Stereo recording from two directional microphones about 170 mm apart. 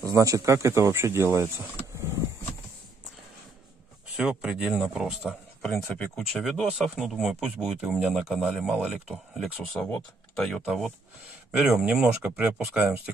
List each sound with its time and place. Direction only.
0.0 s speech: 20° right (ahead or behind)
4.2 s speech: 5° right (ahead or behind)